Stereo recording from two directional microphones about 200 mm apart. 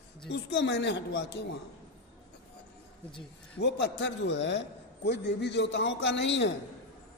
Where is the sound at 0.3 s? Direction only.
60° left (ahead or behind).